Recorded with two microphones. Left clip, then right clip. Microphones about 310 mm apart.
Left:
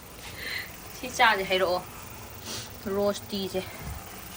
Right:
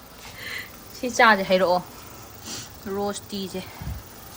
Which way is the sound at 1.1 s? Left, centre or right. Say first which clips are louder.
Right 5 dB; centre.